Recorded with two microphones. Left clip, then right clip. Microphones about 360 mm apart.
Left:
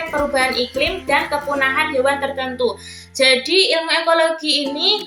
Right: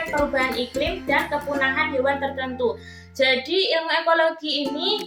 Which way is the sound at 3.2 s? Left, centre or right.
Right.